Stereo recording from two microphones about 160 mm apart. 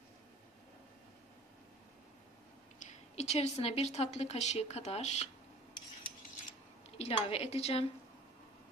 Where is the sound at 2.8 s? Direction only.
45° left (ahead or behind).